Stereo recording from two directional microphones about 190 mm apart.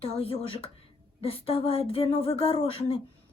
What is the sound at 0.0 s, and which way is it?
Speech, 30° left (ahead or behind).